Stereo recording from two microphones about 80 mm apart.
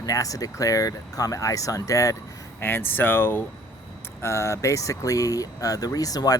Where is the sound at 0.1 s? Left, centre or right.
Left.